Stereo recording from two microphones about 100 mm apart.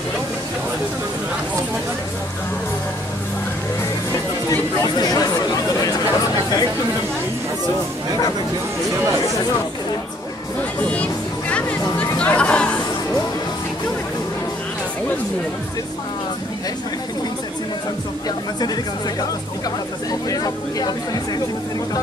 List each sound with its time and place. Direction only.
4.5 s chatter: 40° left (ahead or behind)
10.8 s speech: 15° left (ahead or behind)
11.5 s chatter: 15° left (ahead or behind)
20.1 s speech: 40° left (ahead or behind)